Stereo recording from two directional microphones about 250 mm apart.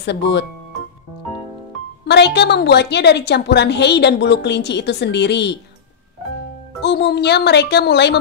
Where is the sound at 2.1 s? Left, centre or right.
Left.